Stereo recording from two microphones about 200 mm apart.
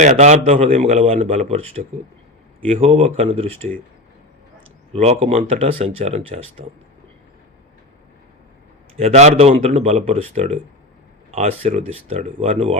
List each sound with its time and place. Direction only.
0.0 s a man's voice: 35° right (ahead or behind)
4.9 s a man's voice: 30° right (ahead or behind)
9.0 s a man's voice: 35° right (ahead or behind)